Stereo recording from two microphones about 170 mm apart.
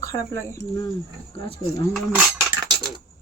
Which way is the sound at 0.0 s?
15° left (ahead or behind).